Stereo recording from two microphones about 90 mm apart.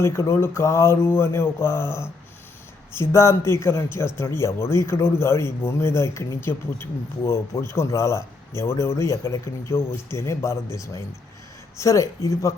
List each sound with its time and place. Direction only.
0.0 s speech: 30° left (ahead or behind)